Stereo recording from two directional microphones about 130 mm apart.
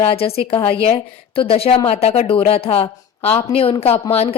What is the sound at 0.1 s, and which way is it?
A woman's voice, 50° left (ahead or behind).